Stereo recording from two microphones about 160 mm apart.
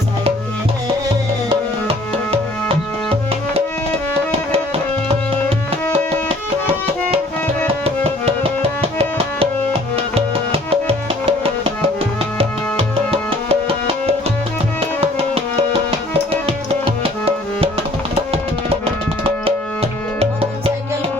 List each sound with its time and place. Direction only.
4.3 s music: 35° right (ahead or behind)
7.9 s music: 35° right (ahead or behind)
9.9 s music: 35° right (ahead or behind)
16.5 s music: 35° right (ahead or behind)
18.1 s music: 35° right (ahead or behind)